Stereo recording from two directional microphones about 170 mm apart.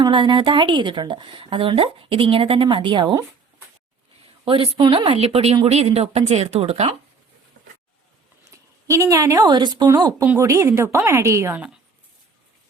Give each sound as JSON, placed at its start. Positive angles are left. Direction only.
{"t": 0.0, "sound": "speech", "side_deg": -30}
{"t": 4.4, "sound": "speech", "side_deg": -30}
{"t": 8.9, "sound": "a woman's voice", "side_deg": -20}